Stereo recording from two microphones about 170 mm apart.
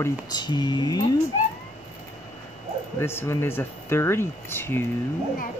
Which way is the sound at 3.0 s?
15° left (ahead or behind).